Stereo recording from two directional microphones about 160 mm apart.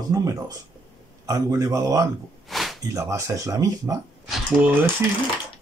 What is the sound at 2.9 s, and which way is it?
Speech, 20° right (ahead or behind).